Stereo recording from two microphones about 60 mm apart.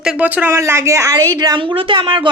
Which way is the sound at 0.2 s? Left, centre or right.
Right.